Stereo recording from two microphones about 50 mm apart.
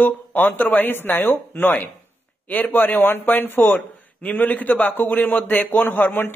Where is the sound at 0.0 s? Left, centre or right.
Left.